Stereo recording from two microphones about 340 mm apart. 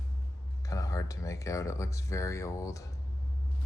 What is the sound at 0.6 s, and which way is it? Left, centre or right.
Speech, centre.